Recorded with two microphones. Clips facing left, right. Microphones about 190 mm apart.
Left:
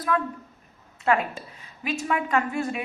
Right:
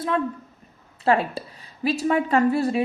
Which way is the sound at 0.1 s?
30° right (ahead or behind).